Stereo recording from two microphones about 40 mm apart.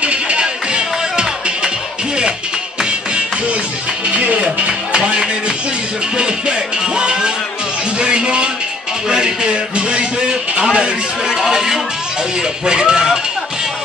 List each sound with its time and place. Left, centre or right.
0.0 s music: right
4.1 s music: right
7.0 s speech: right